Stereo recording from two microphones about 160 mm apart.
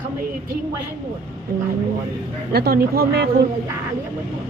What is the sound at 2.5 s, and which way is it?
Speech, 70° right (ahead or behind).